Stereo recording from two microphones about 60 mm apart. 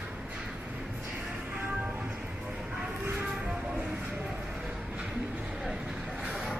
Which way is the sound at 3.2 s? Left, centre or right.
Centre.